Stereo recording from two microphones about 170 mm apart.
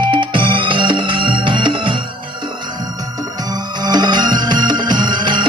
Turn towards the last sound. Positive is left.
turn(degrees=-25)  # may be behind; listen again after turning